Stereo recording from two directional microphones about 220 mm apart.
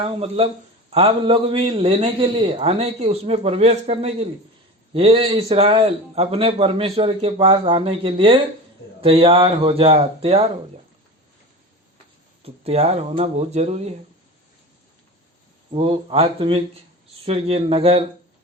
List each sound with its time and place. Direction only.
0.0 s a man's voice: 25° right (ahead or behind)
12.4 s a man's voice: 25° right (ahead or behind)
15.7 s a man's voice: 25° right (ahead or behind)